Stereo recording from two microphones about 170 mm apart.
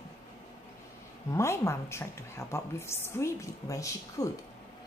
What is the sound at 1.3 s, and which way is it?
A woman's voice, 15° left (ahead or behind).